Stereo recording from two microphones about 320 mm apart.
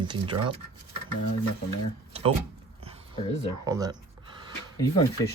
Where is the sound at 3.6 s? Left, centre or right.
Centre.